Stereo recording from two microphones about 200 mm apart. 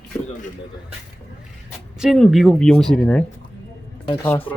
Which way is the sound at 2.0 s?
Centre (ahead or behind).